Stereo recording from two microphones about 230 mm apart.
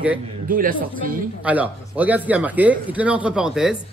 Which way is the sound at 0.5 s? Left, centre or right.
Right.